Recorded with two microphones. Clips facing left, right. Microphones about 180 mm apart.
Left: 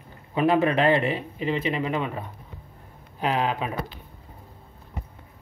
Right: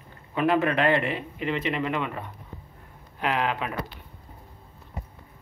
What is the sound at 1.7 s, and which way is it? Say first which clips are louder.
Speech: left 1 dB; 10° left (ahead or behind).